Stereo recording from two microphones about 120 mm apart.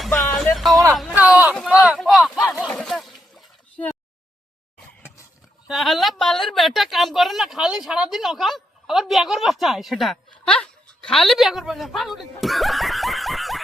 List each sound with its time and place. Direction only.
0.0 s music: centre (ahead or behind)
0.5 s a man's voice: centre (ahead or behind)
1.1 s speech: 10° right (ahead or behind)
2.6 s a sound: 5° left (ahead or behind)
3.8 s a sound: 10° left (ahead or behind)
5.6 s speech: centre (ahead or behind)